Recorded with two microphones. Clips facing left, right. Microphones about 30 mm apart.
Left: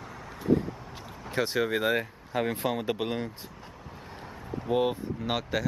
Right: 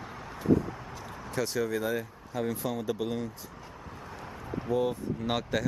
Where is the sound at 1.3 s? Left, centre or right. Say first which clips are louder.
Left 3 dB; left.